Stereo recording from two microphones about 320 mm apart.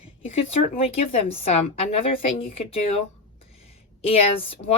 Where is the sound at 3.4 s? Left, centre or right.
Centre.